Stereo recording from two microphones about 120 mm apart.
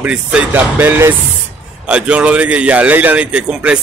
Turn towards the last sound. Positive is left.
turn(degrees=-10)  # may be behind; listen again after turning